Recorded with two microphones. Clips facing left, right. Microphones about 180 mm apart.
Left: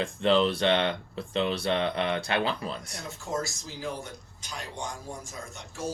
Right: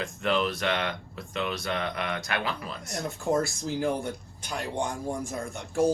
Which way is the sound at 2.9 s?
55° right (ahead or behind).